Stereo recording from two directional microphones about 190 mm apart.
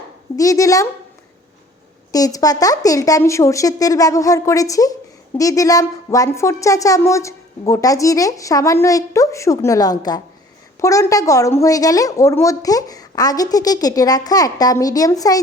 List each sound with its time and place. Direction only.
0.3 s a woman's voice: 15° left (ahead or behind)
2.1 s a woman's voice: 20° left (ahead or behind)